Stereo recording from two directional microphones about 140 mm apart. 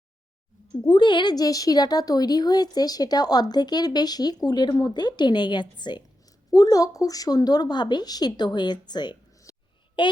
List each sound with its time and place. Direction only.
0.9 s a woman's voice: 35° left (ahead or behind)